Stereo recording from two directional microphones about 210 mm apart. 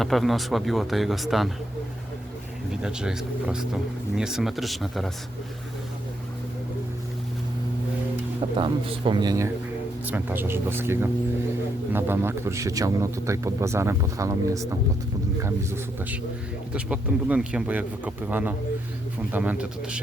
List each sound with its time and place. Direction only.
0.0 s speech: centre (ahead or behind)
2.8 s speech: 5° right (ahead or behind)
8.4 s speech: 25° right (ahead or behind); by 20.0 s 5° right (ahead or behind)